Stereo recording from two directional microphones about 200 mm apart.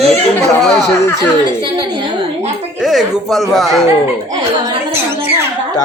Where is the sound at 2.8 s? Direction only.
Centre (ahead or behind).